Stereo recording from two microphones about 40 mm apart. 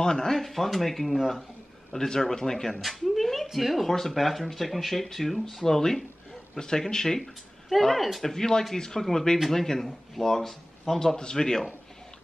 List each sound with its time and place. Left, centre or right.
0.0 s speech: centre
1.9 s speech: centre
2.7 s a sound: centre
3.5 s speech: centre
7.8 s speech: centre
11.0 s speech: centre